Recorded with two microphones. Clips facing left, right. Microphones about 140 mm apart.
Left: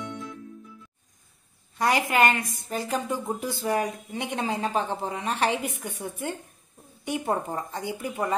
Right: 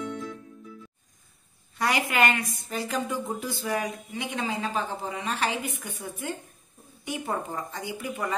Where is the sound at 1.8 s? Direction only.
35° left (ahead or behind).